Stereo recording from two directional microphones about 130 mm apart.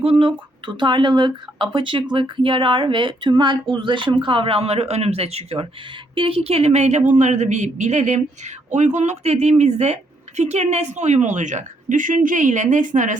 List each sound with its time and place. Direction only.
0.0 s a woman's voice: 45° right (ahead or behind); by 13.1 s 75° right (ahead or behind)